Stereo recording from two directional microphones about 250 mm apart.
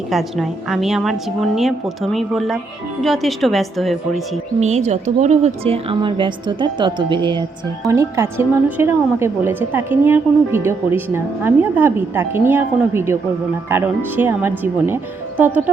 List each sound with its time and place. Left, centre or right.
0.1 s a woman's voice: centre
4.6 s a woman's voice: right; by 15.7 s centre